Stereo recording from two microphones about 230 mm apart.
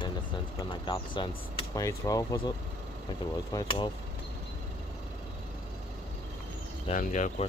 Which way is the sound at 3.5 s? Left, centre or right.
Centre.